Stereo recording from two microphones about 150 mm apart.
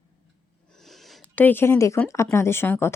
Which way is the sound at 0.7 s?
Centre (ahead or behind).